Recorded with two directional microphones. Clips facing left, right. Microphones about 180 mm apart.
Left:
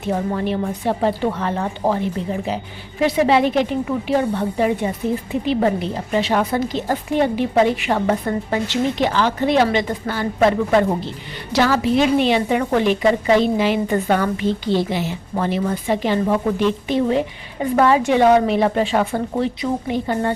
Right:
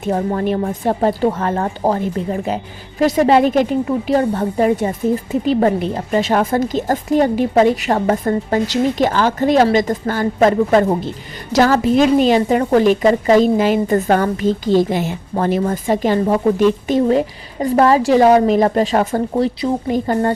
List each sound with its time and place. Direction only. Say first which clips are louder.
0.0 s a woman's voice: right 3 dB; 45° right (ahead or behind)